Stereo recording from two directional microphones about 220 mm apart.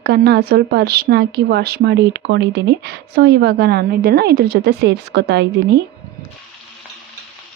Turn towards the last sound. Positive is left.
turn(degrees=-50)  # may be behind; listen again after turning